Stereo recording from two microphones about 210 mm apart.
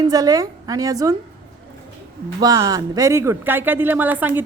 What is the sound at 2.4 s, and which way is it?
A woman's voice, 15° right (ahead or behind).